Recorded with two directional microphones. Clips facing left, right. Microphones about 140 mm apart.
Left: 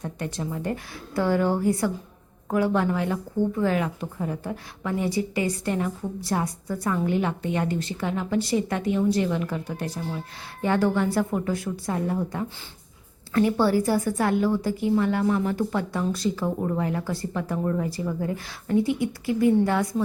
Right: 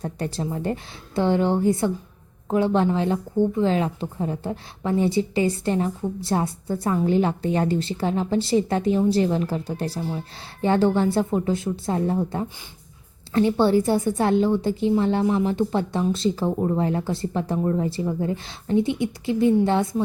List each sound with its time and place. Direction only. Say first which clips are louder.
0.0 s a woman's voice: right 3 dB; 30° right (ahead or behind)